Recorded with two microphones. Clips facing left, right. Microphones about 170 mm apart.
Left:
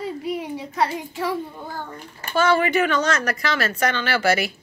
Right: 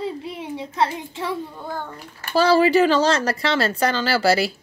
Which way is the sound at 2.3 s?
30° right (ahead or behind).